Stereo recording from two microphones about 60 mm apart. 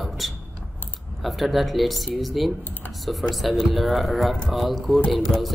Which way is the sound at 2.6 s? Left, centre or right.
Left.